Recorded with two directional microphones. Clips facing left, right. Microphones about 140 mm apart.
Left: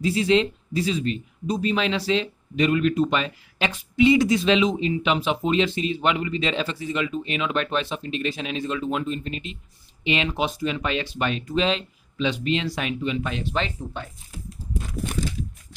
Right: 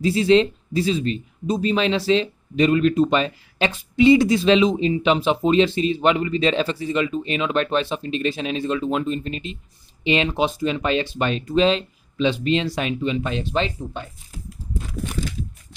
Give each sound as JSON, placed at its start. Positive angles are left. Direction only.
{"t": 0.0, "sound": "speech", "side_deg": -30}